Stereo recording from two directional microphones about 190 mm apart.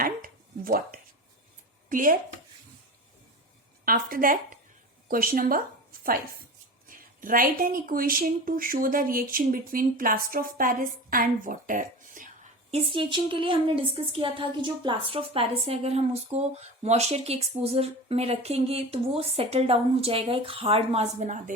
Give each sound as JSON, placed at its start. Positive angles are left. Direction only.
{"t": 0.0, "sound": "a sound", "side_deg": -50}
{"t": 1.9, "sound": "speech", "side_deg": -45}
{"t": 3.8, "sound": "a woman's voice", "side_deg": -50}